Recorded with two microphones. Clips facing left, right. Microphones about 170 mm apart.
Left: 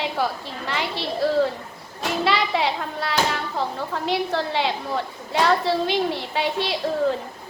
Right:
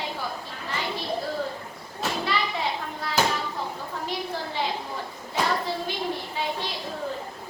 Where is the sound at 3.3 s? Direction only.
75° left (ahead or behind).